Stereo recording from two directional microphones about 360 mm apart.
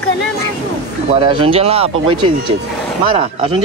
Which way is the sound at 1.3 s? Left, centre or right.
Centre.